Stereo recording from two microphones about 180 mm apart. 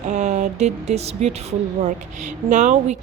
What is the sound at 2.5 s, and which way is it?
Speech, 40° right (ahead or behind).